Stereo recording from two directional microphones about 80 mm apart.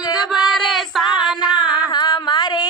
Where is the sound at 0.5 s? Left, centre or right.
Centre.